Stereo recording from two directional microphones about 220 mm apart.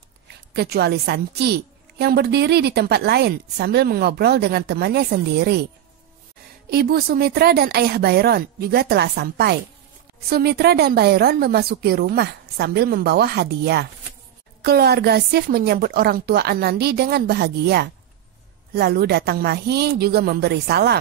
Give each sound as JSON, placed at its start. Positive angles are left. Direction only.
{"t": 0.5, "sound": "a woman's voice", "side_deg": -45}
{"t": 6.7, "sound": "a woman's voice", "side_deg": -45}